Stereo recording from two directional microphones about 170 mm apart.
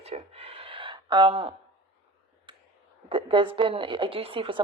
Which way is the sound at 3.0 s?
30° right (ahead or behind).